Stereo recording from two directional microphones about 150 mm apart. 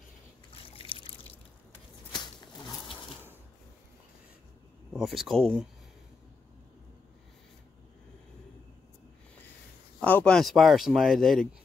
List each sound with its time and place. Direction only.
0.5 s trickle: 35° left (ahead or behind)
4.9 s speech: centre (ahead or behind)
9.9 s speech: 10° left (ahead or behind)